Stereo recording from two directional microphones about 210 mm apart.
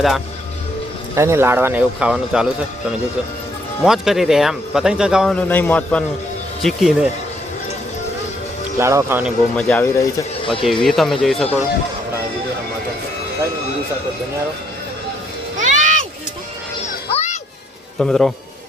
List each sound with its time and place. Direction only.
1.1 s speech: 15° right (ahead or behind)
3.8 s speech: centre (ahead or behind)
8.8 s speech: 15° right (ahead or behind)
9.6 s speech: 5° left (ahead or behind)
10.4 s speech: 25° left (ahead or behind)
10.7 s speech: centre (ahead or behind)
15.5 s music: 35° right (ahead or behind)
17.1 s music: 30° left (ahead or behind)
18.0 s speech: 5° left (ahead or behind)